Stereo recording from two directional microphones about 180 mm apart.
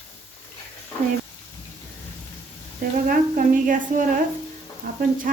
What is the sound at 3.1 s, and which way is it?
Speech, 50° right (ahead or behind).